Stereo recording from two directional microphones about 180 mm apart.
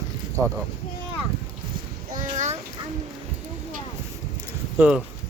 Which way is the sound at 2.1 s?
45° right (ahead or behind).